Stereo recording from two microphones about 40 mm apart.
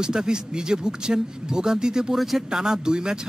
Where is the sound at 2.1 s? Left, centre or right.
Centre.